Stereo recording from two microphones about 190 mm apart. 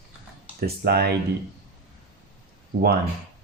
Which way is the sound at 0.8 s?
55° right (ahead or behind).